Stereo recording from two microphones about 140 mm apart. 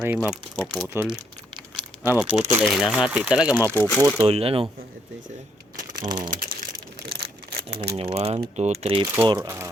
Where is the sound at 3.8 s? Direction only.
15° left (ahead or behind).